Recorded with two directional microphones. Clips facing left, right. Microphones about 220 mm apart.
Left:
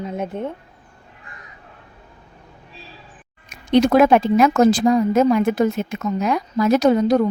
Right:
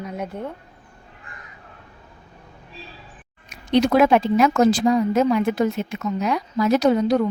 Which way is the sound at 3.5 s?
50° left (ahead or behind).